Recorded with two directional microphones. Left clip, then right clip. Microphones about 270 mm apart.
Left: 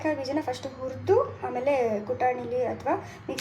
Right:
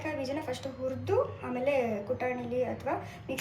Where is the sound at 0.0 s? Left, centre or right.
Left.